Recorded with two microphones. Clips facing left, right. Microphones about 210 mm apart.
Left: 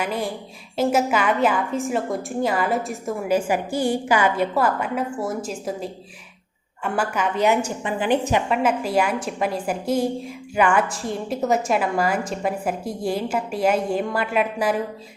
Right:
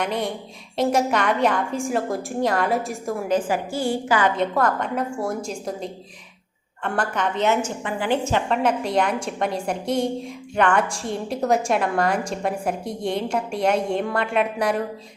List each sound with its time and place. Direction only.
0.0 s a woman's voice: 5° left (ahead or behind)